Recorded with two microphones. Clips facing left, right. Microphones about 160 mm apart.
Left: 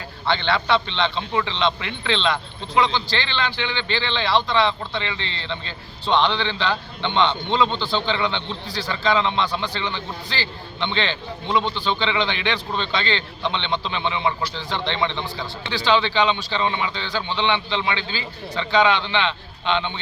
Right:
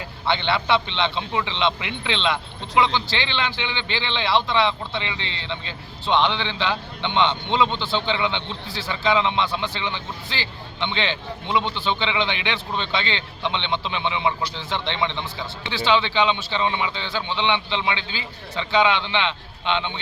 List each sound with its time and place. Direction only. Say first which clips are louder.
0.3 s a man's voice: left 1 dB; 15° right (ahead or behind)